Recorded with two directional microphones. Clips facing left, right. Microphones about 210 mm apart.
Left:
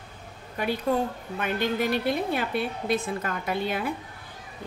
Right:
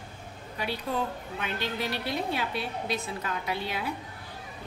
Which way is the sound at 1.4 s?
50° left (ahead or behind).